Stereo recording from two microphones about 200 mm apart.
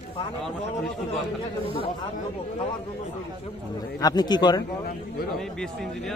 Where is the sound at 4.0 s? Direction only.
20° left (ahead or behind).